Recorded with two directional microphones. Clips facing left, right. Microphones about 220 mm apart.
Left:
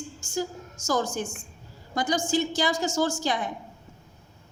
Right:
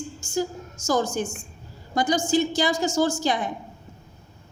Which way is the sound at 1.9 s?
15° right (ahead or behind).